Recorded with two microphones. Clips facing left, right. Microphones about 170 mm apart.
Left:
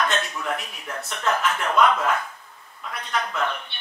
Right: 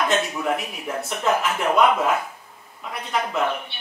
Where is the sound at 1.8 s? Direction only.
5° right (ahead or behind).